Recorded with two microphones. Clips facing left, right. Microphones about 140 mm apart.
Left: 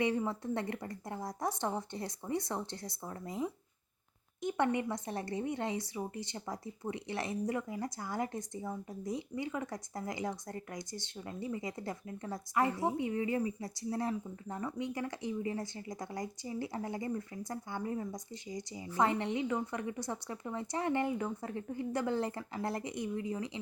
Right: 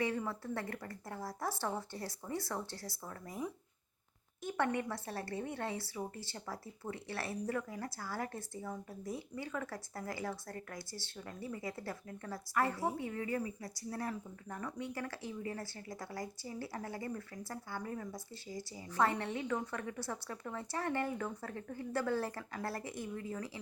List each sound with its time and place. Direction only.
0.0 s a woman's voice: 20° left (ahead or behind)